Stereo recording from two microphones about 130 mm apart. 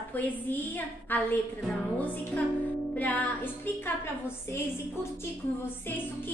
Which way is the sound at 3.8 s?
20° left (ahead or behind).